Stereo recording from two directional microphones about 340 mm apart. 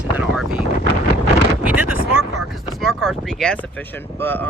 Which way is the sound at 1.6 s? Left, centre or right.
Centre.